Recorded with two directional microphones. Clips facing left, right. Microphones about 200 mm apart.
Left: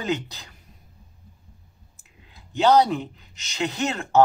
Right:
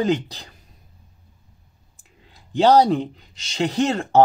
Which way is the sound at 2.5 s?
30° right (ahead or behind).